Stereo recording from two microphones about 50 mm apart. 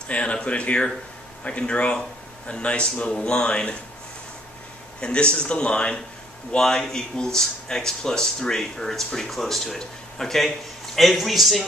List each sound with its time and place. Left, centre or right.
0.1 s speech: left
5.0 s speech: centre